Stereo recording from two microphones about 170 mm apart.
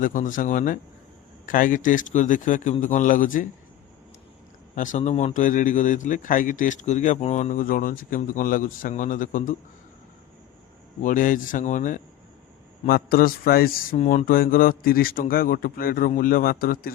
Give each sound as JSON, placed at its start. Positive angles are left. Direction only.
{"t": 0.0, "sound": "a man's voice", "side_deg": 50}
{"t": 4.7, "sound": "a man's voice", "side_deg": 50}
{"t": 11.0, "sound": "a man's voice", "side_deg": 50}
{"t": 13.9, "sound": "speech", "side_deg": 40}